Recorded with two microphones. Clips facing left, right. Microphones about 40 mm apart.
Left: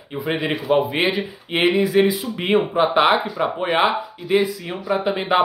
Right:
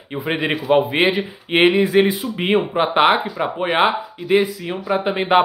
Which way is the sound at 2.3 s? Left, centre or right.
Centre.